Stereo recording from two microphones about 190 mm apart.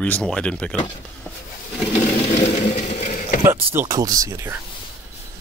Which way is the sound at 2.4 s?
35° left (ahead or behind).